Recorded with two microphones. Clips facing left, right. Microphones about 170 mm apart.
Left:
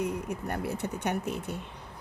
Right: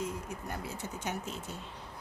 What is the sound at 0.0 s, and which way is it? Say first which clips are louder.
Speech: left 6 dB; 65° left (ahead or behind).